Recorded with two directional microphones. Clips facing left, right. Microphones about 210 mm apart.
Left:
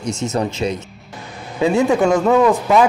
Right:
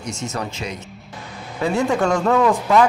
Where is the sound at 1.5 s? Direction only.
15° left (ahead or behind).